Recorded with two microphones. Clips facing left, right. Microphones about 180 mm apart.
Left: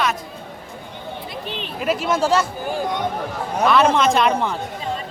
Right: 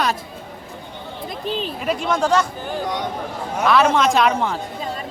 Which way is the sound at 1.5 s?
40° right (ahead or behind).